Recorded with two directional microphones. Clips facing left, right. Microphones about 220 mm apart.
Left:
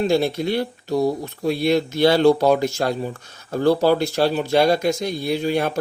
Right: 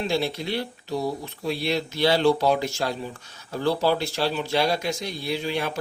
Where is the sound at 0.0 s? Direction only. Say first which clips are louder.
Left 7 dB; 45° left (ahead or behind).